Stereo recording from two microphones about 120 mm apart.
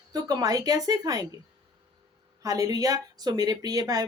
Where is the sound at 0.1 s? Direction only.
35° right (ahead or behind).